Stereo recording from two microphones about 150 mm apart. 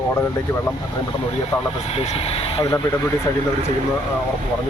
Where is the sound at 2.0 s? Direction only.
40° left (ahead or behind).